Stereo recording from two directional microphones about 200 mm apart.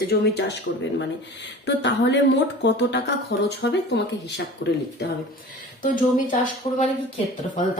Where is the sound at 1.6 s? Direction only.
60° left (ahead or behind).